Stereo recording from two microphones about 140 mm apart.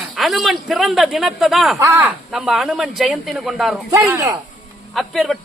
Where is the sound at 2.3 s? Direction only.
Centre (ahead or behind).